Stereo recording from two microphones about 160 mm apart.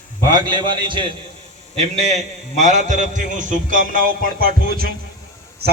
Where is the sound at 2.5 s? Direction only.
50° right (ahead or behind); by 4.8 s 65° right (ahead or behind).